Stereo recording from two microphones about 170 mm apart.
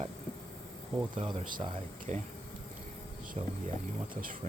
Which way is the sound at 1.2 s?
30° right (ahead or behind).